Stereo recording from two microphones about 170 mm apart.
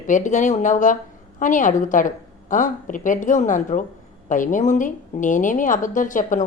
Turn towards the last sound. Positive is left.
turn(degrees=50)  # may be behind; listen again after turning